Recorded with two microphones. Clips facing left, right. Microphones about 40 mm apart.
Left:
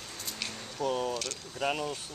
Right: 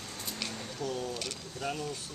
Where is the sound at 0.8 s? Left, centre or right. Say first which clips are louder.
Left 5 dB; left.